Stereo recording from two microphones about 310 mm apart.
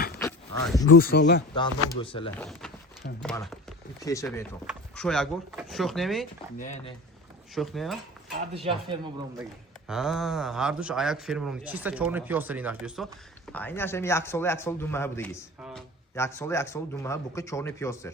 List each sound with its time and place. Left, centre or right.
0.2 s a sound: centre
0.9 s speech: left
2.0 s a man's voice: centre
2.3 s a man's voice: centre
6.6 s speech: left
7.5 s speech: centre
8.5 s speech: centre
9.4 s a man's voice: centre